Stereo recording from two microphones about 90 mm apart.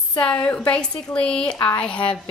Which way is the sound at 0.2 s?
15° left (ahead or behind).